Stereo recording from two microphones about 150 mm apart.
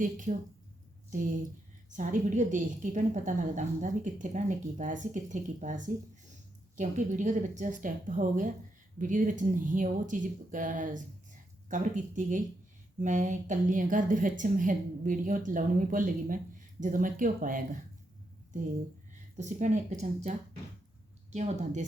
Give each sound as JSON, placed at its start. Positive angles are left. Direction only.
{"t": 0.0, "sound": "a woman's voice", "side_deg": -60}
{"t": 1.9, "sound": "a woman's voice", "side_deg": -55}
{"t": 19.4, "sound": "speech", "side_deg": -55}
{"t": 21.3, "sound": "speech", "side_deg": -50}